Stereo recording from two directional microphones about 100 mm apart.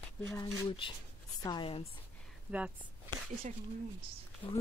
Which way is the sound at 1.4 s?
45° left (ahead or behind).